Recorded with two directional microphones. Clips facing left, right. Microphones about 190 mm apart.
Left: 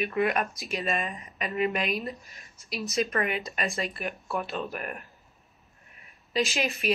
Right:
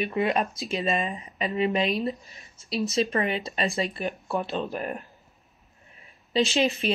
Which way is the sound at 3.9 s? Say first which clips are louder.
Right 3 dB; 25° right (ahead or behind).